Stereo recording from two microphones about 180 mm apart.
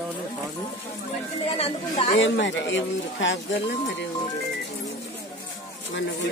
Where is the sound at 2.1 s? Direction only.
90° left.